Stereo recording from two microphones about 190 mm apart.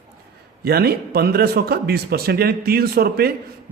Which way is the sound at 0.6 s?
55° right (ahead or behind).